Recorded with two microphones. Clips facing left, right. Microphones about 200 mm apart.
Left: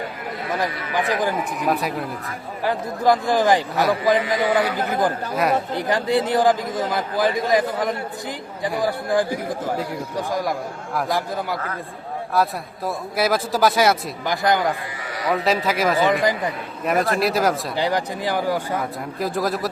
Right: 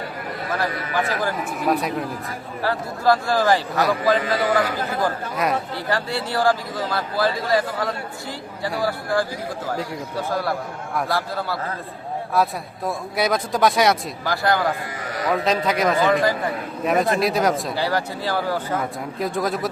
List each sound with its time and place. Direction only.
0.5 s a man's voice: 15° left (ahead or behind)
1.7 s a man's voice: centre (ahead or behind)
2.6 s a man's voice: 15° left (ahead or behind)
5.3 s a man's voice: centre (ahead or behind)
5.7 s a man's voice: 20° left (ahead or behind)
12.3 s a man's voice: centre (ahead or behind)
14.3 s speech: 20° left (ahead or behind)
15.3 s a man's voice: 5° left (ahead or behind)
16.0 s a man's voice: 15° left (ahead or behind)
16.8 s a man's voice: centre (ahead or behind)
17.7 s a man's voice: 20° left (ahead or behind)
18.8 s a man's voice: centre (ahead or behind)